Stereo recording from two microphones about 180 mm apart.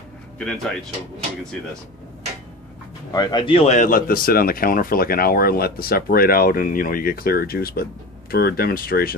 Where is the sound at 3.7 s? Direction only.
50° left (ahead or behind).